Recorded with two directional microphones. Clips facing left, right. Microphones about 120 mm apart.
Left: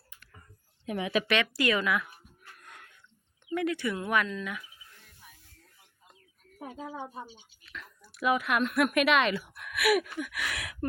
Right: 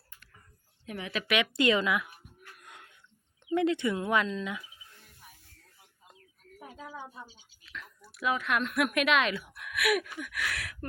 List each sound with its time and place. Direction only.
0.9 s speech: 15° left (ahead or behind)
1.4 s speech: 20° right (ahead or behind)
2.6 s a sound: 20° right (ahead or behind)
3.4 s speech: 25° right (ahead or behind)
6.6 s speech: 45° left (ahead or behind)
7.6 s speech: centre (ahead or behind)
10.5 s a sound: 20° left (ahead or behind)